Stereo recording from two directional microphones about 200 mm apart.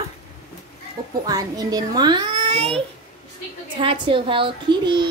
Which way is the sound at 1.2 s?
20° right (ahead or behind).